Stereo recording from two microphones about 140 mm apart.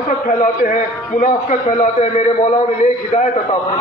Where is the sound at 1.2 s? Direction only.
60° left (ahead or behind).